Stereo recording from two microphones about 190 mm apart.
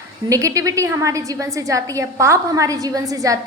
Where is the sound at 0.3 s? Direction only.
15° right (ahead or behind).